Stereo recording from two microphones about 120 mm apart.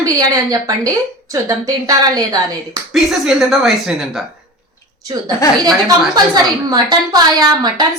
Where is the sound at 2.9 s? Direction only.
Centre (ahead or behind).